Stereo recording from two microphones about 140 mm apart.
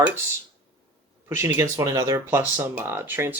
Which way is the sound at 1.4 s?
20° right (ahead or behind).